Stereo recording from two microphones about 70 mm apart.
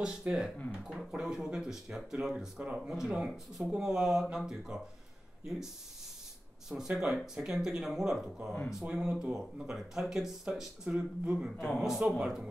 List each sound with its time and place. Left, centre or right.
0.3 s speech: right
0.8 s speech: centre
6.7 s speech: centre